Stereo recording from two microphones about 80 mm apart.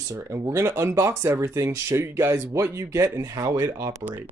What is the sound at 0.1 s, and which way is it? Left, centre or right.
Speech, right.